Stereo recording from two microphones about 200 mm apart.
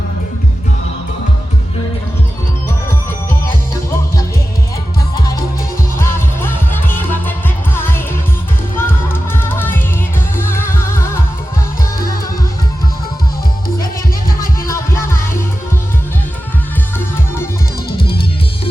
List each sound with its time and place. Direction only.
6.0 s music: 10° left (ahead or behind)
17.9 s music: 50° left (ahead or behind)